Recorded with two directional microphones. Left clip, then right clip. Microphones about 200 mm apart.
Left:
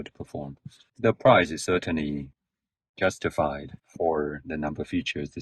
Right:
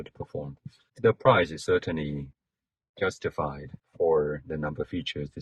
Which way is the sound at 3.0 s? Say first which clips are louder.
Left 4 dB; 45° left (ahead or behind).